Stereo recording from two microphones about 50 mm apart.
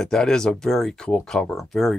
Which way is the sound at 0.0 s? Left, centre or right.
Centre.